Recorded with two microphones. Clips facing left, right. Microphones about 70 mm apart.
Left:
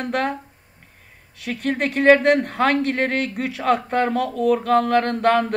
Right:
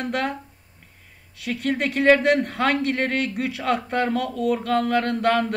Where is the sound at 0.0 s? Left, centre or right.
Centre.